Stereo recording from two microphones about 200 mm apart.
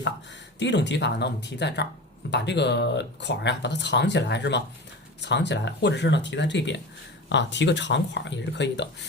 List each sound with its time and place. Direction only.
0.6 s speech: 60° left (ahead or behind)